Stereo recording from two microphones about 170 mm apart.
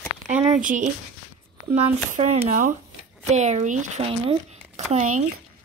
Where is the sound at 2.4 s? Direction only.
50° right (ahead or behind).